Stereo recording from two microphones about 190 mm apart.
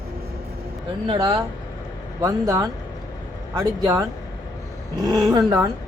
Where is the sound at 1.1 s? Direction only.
25° right (ahead or behind).